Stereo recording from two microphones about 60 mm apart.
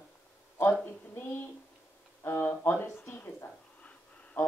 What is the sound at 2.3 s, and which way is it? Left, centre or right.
Speech, left.